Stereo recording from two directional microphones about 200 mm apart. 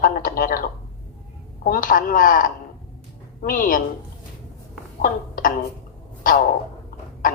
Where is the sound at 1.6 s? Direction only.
45° left (ahead or behind).